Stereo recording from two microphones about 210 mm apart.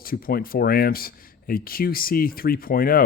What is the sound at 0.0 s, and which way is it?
Speech, 45° left (ahead or behind).